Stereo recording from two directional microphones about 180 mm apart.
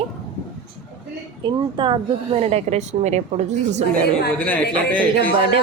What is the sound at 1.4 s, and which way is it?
A woman's voice, 25° right (ahead or behind).